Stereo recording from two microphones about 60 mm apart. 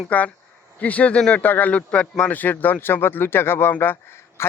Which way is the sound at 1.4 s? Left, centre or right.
Left.